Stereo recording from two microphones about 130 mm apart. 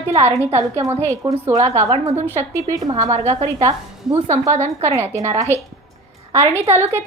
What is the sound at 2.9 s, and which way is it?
Speech, 60° right (ahead or behind).